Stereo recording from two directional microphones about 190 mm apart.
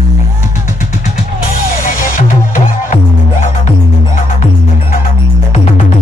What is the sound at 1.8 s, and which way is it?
Music, 45° left (ahead or behind).